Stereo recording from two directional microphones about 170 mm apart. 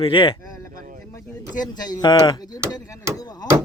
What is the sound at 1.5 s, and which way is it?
Speech, 25° left (ahead or behind).